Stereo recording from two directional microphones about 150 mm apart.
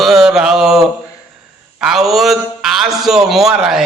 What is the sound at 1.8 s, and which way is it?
Speech, centre (ahead or behind).